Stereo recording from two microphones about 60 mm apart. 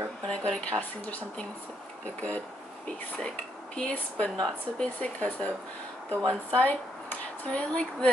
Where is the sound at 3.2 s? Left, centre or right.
Centre.